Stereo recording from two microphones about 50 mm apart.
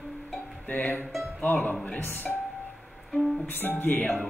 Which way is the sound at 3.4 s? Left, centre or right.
Left.